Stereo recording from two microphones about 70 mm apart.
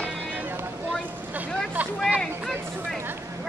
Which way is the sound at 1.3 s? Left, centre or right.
Right.